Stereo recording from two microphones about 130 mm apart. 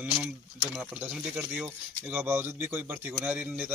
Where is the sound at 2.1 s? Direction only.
15° right (ahead or behind).